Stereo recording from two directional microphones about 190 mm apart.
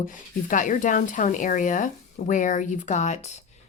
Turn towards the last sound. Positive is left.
turn(degrees=35)  # may be behind; listen again after turning